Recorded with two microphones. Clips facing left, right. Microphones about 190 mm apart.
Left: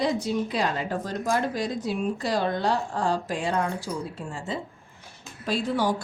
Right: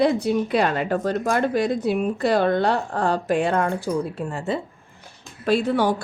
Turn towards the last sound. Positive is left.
turn(degrees=-65)  # may be behind; listen again after turning